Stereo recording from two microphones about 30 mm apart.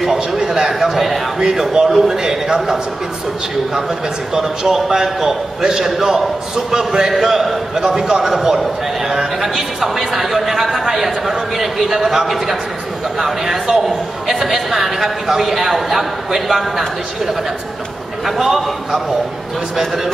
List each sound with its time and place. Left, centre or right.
0.4 s a sound: centre
0.7 s a man's voice: centre
1.6 s a man's voice: centre
4.3 s a man's voice: centre
18.2 s a man's voice: centre